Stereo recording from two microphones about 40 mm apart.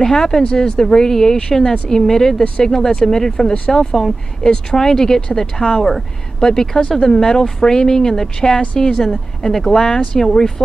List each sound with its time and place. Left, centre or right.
0.0 s speech: centre